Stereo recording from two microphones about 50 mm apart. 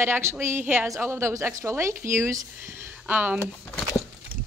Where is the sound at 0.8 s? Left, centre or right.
Right.